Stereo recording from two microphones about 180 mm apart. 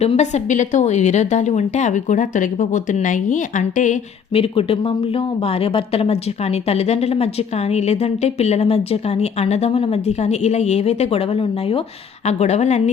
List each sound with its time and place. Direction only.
0.0 s speech: 35° left (ahead or behind)
4.4 s speech: 30° left (ahead or behind)